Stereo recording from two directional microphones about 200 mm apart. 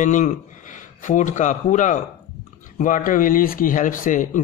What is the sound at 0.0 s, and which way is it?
Speech, 40° left (ahead or behind).